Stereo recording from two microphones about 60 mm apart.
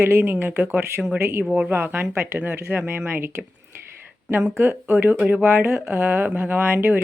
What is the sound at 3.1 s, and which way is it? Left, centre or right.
Speech, right.